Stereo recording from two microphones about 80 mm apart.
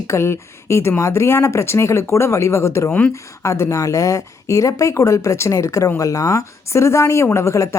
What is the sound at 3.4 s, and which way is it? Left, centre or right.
Speech, left.